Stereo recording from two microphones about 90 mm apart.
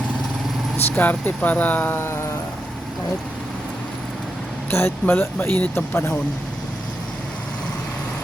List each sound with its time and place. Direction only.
0.9 s speech: 15° left (ahead or behind)
4.7 s speech: 25° left (ahead or behind)